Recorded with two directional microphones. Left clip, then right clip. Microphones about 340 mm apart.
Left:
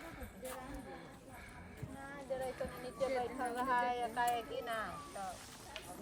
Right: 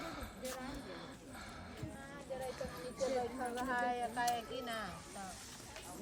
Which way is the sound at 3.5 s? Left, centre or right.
Left.